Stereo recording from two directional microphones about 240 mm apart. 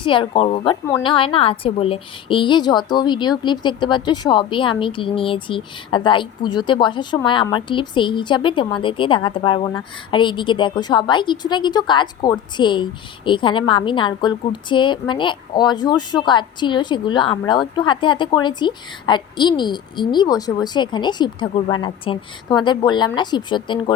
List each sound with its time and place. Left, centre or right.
0.0 s a woman's voice: left